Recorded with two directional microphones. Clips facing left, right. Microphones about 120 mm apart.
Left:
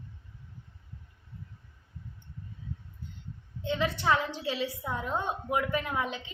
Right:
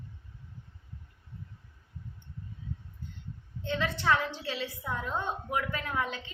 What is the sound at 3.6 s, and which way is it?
A woman's voice, 15° left (ahead or behind).